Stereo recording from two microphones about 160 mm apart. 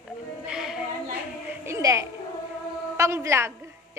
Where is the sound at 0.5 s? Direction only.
5° right (ahead or behind).